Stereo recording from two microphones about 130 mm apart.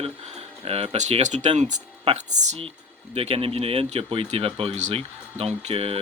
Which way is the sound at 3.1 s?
50° right (ahead or behind).